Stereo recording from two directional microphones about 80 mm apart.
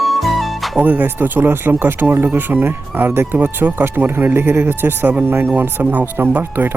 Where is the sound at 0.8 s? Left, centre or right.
Right.